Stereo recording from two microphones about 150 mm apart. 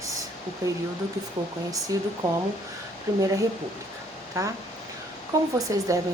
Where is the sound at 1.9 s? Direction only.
25° right (ahead or behind).